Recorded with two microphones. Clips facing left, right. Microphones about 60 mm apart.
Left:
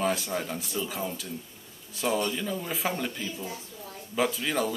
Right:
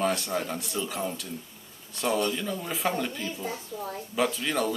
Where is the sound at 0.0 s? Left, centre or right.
Centre.